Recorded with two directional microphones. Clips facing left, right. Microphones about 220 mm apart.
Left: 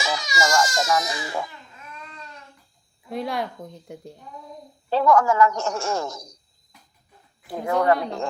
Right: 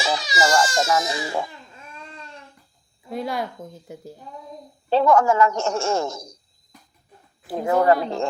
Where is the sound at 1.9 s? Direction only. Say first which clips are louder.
Right 1 dB; 30° right (ahead or behind).